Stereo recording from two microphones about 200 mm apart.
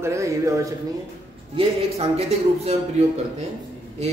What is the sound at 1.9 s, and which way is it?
Speech, 30° right (ahead or behind).